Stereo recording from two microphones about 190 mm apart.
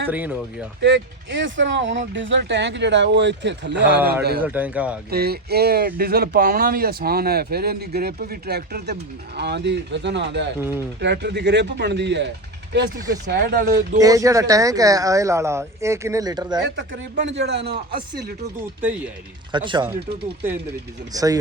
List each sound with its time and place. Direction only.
0.1 s speech: 10° right (ahead or behind)
0.8 s speech: 70° right (ahead or behind)
4.4 s speech: 10° right (ahead or behind)
5.1 s speech: 55° right (ahead or behind)
10.6 s speech: 10° right (ahead or behind)
11.0 s speech: 65° right (ahead or behind); by 14.0 s 45° right (ahead or behind)
14.0 s speech: 15° right (ahead or behind)
16.6 s speech: 65° right (ahead or behind)
18.8 s speech: 5° right (ahead or behind)
19.5 s speech: 25° right (ahead or behind)
21.1 s speech: 20° right (ahead or behind)